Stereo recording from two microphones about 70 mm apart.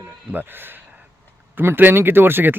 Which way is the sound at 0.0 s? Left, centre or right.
Right.